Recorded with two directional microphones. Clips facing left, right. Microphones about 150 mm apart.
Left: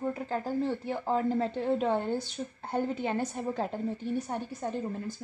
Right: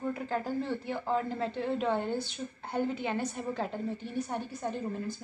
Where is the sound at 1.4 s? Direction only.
40° left (ahead or behind).